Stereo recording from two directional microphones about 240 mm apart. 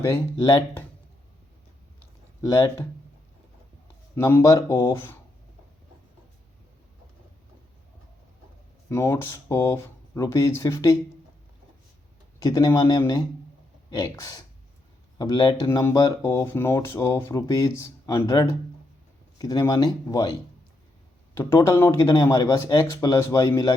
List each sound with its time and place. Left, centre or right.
0.0 s speech: centre
2.4 s speech: centre
4.1 s speech: centre
8.9 s speech: centre
12.4 s speech: centre